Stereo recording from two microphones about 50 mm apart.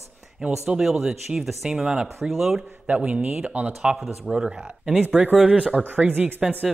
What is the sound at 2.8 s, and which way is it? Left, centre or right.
Speech, right.